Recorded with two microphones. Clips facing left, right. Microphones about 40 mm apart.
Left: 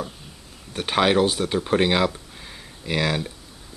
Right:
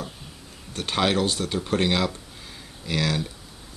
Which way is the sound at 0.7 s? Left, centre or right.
Centre.